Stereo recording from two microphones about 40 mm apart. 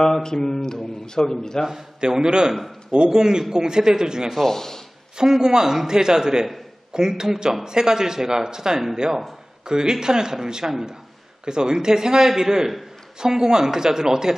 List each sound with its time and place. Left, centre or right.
0.0 s a man's voice: centre
1.7 s a man's voice: centre
4.3 s a man's voice: centre
5.1 s a man's voice: centre